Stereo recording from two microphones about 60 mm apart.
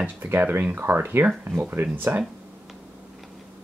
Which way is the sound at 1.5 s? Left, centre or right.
Centre.